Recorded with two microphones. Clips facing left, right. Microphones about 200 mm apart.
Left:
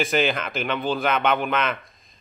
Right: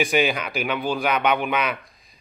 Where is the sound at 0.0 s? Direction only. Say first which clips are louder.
Right 1 dB; centre (ahead or behind).